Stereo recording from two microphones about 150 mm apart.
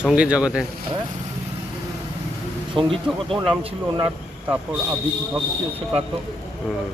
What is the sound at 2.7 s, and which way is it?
Speech, 35° right (ahead or behind).